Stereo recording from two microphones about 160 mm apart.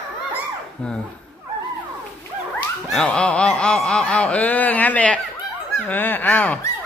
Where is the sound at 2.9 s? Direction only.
5° left (ahead or behind).